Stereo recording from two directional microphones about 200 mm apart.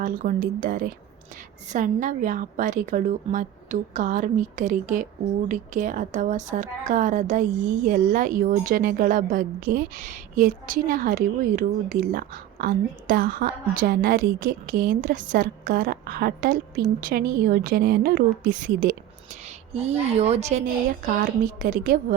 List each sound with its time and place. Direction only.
0.0 s a woman's voice: 40° right (ahead or behind)